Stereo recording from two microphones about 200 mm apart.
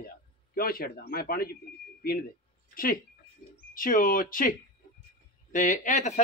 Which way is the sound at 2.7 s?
45° left (ahead or behind).